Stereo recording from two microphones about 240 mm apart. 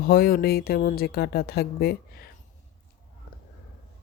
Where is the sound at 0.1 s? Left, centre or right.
Left.